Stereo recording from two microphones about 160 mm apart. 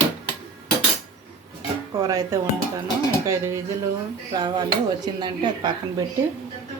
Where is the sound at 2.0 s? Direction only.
20° right (ahead or behind).